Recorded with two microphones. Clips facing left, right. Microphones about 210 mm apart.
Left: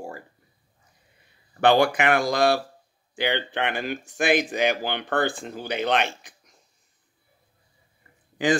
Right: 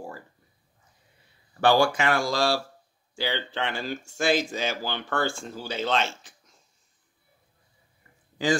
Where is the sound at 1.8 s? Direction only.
60° left (ahead or behind).